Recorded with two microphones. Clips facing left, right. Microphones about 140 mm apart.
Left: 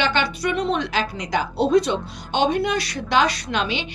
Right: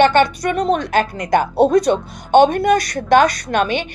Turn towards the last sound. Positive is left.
turn(degrees=-50)  # may be behind; listen again after turning